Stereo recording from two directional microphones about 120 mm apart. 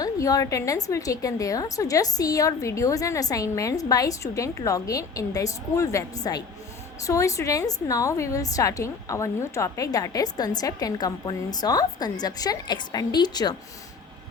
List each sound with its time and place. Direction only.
0.0 s a woman's voice: 30° left (ahead or behind)